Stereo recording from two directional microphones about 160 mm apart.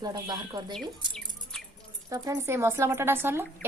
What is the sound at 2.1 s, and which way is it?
Speech, 20° right (ahead or behind).